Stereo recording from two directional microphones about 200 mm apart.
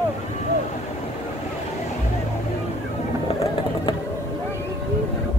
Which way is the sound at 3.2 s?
30° left (ahead or behind).